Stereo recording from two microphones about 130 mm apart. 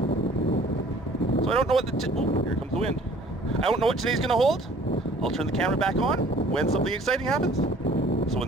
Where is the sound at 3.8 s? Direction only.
Centre (ahead or behind).